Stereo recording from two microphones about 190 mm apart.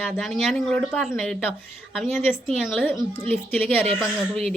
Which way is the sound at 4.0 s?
Centre (ahead or behind).